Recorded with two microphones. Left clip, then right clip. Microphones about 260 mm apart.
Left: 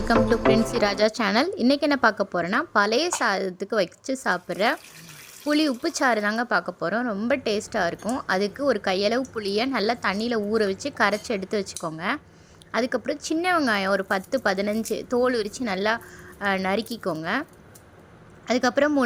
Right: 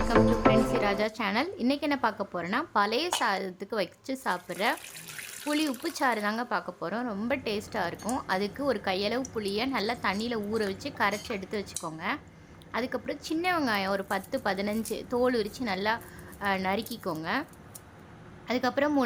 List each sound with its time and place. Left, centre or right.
0.7 s speech: left
18.4 s speech: centre